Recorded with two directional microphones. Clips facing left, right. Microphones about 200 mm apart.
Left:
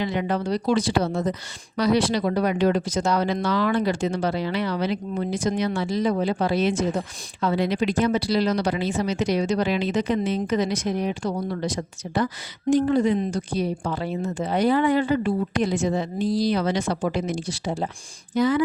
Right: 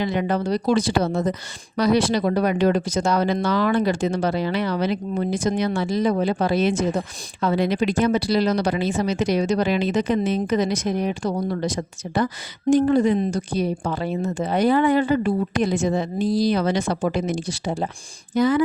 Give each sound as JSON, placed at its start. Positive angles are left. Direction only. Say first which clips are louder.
{"t": 0.0, "sound": "a woman's voice", "louder": "right 2 dB", "side_deg": -45}